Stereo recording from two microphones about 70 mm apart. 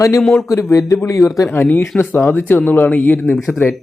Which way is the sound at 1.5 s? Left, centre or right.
Left.